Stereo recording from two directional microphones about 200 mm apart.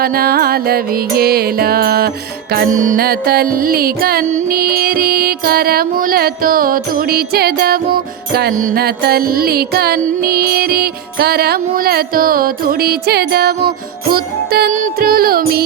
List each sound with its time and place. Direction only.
0.0 s music: 50° right (ahead or behind)